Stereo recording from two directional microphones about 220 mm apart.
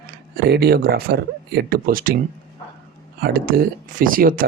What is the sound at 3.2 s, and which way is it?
Speech, 40° right (ahead or behind).